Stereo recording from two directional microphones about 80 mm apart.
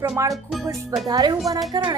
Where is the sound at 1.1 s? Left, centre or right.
Right.